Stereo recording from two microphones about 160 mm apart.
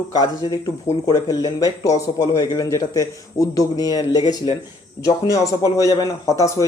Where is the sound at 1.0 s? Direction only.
25° left (ahead or behind).